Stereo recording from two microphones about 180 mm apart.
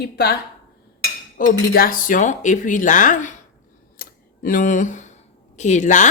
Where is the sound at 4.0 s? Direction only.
50° left (ahead or behind).